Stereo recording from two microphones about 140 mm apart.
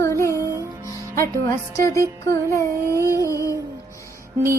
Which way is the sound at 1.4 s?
20° left (ahead or behind).